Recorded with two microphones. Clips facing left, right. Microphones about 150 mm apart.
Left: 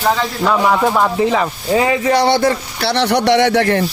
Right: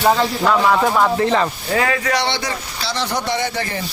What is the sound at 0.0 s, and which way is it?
Speech, 10° right (ahead or behind).